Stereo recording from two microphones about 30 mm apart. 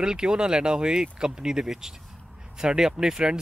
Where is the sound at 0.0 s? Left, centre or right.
Right.